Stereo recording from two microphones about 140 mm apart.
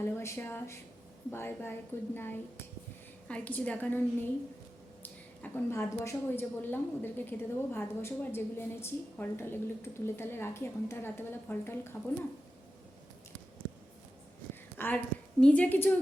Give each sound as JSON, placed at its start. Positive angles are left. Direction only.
{"t": 0.0, "sound": "a woman's voice", "side_deg": 20}
{"t": 14.8, "sound": "a woman's voice", "side_deg": 10}